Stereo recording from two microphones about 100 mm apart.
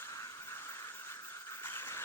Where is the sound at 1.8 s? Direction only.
25° left (ahead or behind).